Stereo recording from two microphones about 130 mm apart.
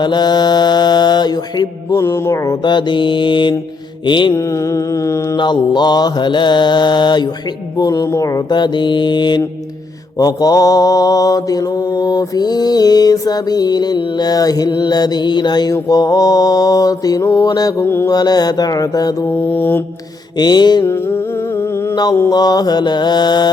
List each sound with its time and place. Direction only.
0.0 s mantra: 35° left (ahead or behind)
1.9 s mantra: 20° left (ahead or behind); by 4.4 s 35° left (ahead or behind)
5.4 s mantra: 35° left (ahead or behind)
17.8 s mantra: 20° left (ahead or behind)
18.1 s mantra: 30° left (ahead or behind)
19.5 s mantra: 15° left (ahead or behind)
20.4 s mantra: 35° left (ahead or behind)
22.3 s mantra: 30° left (ahead or behind)